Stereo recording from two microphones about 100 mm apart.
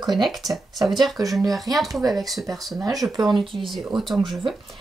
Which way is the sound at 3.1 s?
45° right (ahead or behind).